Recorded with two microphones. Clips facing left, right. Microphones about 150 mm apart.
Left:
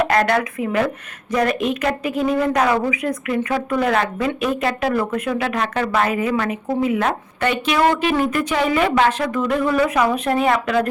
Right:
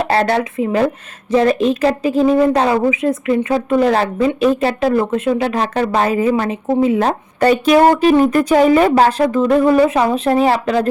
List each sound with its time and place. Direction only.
0.0 s a woman's voice: 30° right (ahead or behind)
7.3 s a woman's voice: 40° right (ahead or behind)